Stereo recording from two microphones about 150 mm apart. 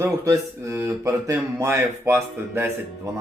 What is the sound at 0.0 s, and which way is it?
Speech, 20° right (ahead or behind).